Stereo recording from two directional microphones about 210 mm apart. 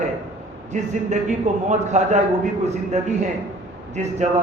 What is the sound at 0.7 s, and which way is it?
A man's voice, 35° right (ahead or behind).